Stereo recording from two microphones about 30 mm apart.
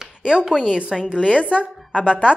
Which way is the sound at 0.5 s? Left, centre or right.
Centre.